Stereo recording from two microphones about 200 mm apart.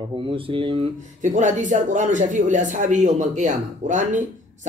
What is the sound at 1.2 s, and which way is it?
Speech, 40° right (ahead or behind).